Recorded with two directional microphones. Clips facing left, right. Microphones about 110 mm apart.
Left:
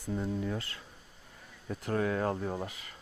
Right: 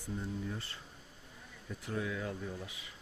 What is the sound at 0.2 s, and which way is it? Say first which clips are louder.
Speech: left 7 dB; 90° left.